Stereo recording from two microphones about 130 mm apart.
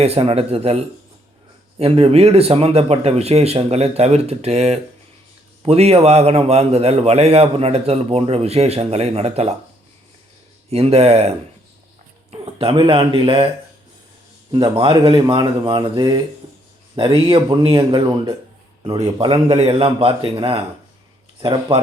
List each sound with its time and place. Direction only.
0.0 s a man's voice: 50° right (ahead or behind)
1.8 s a man's voice: 50° right (ahead or behind)
10.7 s a man's voice: 50° right (ahead or behind)
14.5 s speech: 40° right (ahead or behind)
19.5 s a man's voice: 50° right (ahead or behind)